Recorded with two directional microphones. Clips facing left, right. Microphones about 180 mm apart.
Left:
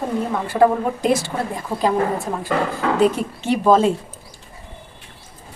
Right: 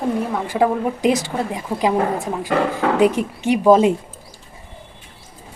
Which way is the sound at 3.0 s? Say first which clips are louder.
Even; 15° right (ahead or behind).